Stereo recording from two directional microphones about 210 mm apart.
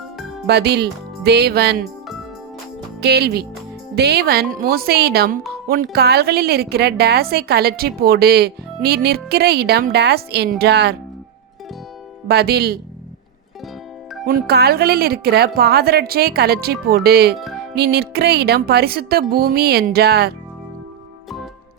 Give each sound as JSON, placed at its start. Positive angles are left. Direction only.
{"t": 0.4, "sound": "a woman's voice", "side_deg": -50}
{"t": 3.0, "sound": "a woman's voice", "side_deg": -50}
{"t": 12.3, "sound": "a woman's voice", "side_deg": -50}
{"t": 14.3, "sound": "a woman's voice", "side_deg": -45}